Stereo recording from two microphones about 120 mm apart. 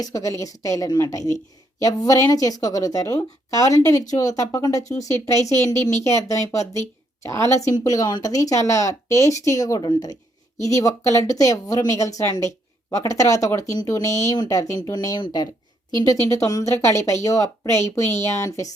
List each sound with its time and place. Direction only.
0.0 s speech: 30° left (ahead or behind)